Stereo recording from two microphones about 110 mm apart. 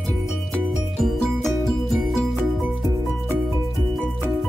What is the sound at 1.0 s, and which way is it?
Music, centre (ahead or behind).